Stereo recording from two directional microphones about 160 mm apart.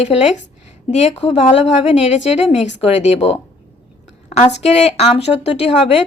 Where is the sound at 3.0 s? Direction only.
40° left (ahead or behind).